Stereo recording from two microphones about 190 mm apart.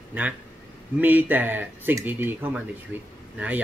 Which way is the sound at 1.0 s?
10° right (ahead or behind).